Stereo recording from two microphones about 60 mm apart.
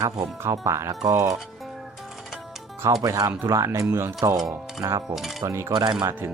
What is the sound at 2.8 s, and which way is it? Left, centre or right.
Speech, right.